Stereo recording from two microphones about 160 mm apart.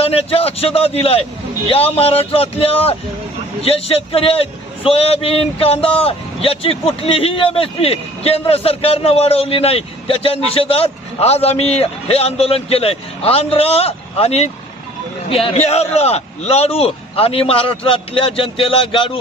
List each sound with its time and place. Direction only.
0.0 s a man's voice: 40° left (ahead or behind)